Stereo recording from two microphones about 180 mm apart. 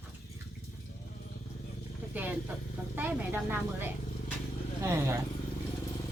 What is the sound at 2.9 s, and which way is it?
A woman's voice, 10° right (ahead or behind).